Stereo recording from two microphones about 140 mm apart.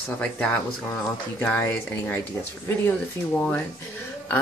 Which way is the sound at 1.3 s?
10° left (ahead or behind).